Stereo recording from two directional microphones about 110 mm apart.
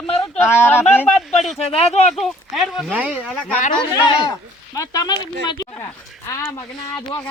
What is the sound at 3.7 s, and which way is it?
Speech, 45° left (ahead or behind).